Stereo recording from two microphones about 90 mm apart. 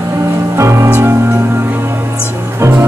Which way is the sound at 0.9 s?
15° right (ahead or behind).